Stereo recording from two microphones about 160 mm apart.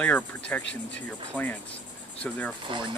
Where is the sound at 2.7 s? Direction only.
30° right (ahead or behind).